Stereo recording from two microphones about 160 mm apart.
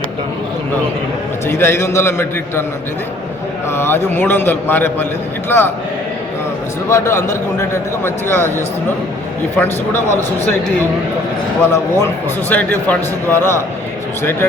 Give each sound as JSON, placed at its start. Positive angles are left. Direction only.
{"t": 1.5, "sound": "a man's voice", "side_deg": 15}
{"t": 3.7, "sound": "a man's voice", "side_deg": 15}
{"t": 6.8, "sound": "a man's voice", "side_deg": 15}
{"t": 11.7, "sound": "a man's voice", "side_deg": 15}